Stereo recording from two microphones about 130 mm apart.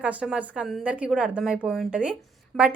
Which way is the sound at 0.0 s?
10° right (ahead or behind).